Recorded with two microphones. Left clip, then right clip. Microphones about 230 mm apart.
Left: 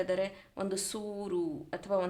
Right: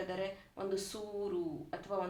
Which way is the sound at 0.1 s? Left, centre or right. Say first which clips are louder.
Left 7 dB; left.